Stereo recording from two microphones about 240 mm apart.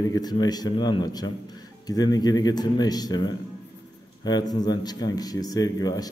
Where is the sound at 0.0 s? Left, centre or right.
Centre.